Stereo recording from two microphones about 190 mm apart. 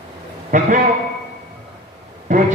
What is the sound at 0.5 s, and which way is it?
Speech, 40° right (ahead or behind).